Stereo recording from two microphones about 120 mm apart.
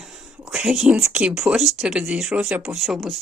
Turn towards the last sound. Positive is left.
turn(degrees=0)  # may be behind; listen again after turning